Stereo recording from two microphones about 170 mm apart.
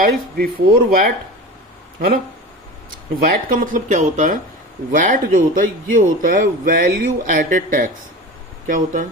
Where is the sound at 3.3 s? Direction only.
50° right (ahead or behind).